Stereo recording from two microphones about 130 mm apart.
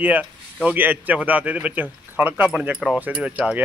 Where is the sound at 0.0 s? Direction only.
10° right (ahead or behind).